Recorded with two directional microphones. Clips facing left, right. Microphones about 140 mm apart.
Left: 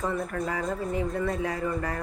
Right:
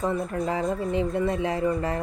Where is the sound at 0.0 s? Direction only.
25° right (ahead or behind).